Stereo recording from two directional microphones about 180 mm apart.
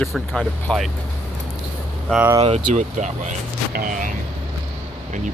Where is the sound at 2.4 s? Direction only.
40° right (ahead or behind).